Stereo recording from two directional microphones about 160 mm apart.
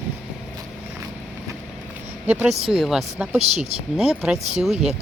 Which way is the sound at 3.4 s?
40° right (ahead or behind).